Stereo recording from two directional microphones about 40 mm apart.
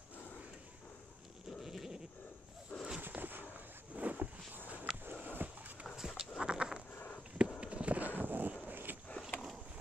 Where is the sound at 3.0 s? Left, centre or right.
Right.